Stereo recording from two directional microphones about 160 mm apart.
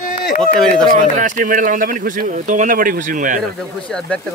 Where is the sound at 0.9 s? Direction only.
50° right (ahead or behind).